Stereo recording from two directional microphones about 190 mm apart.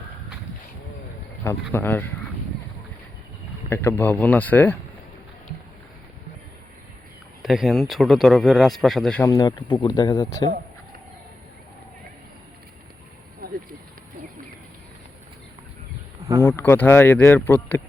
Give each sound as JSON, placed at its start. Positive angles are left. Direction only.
{"t": 1.7, "sound": "speech", "side_deg": 10}
{"t": 3.7, "sound": "speech", "side_deg": 10}
{"t": 7.4, "sound": "speech", "side_deg": 0}
{"t": 9.2, "sound": "speech", "side_deg": 20}
{"t": 13.4, "sound": "a sound", "side_deg": -50}
{"t": 16.4, "sound": "speech", "side_deg": 10}